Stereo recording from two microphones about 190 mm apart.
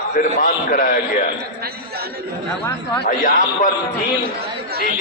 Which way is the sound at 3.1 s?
45° left (ahead or behind).